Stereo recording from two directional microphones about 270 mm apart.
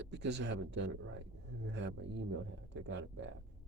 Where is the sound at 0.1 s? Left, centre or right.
Right.